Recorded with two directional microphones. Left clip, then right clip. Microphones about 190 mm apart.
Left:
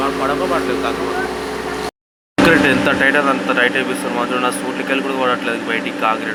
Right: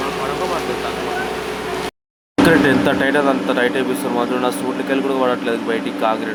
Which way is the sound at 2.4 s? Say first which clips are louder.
Left 1 dB; 20° right (ahead or behind).